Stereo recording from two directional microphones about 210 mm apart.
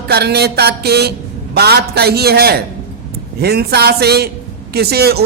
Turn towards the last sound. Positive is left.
turn(degrees=-50)  # may be behind; listen again after turning